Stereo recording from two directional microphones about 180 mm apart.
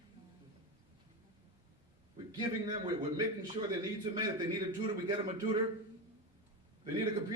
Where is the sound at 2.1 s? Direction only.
25° right (ahead or behind).